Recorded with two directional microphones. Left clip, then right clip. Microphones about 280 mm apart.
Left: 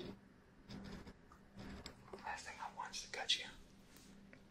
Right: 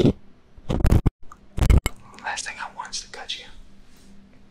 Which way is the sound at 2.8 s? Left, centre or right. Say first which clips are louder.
Right 13 dB; centre.